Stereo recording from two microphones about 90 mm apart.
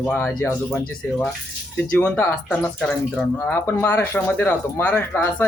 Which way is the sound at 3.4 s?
30° left (ahead or behind).